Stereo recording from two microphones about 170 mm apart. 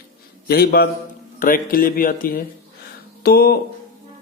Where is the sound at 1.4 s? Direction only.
55° left (ahead or behind).